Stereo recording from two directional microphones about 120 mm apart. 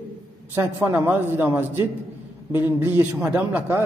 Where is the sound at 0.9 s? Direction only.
15° right (ahead or behind).